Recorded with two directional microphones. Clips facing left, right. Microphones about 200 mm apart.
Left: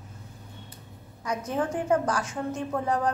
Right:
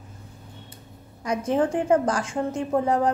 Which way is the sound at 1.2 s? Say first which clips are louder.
Right 6 dB; 30° right (ahead or behind).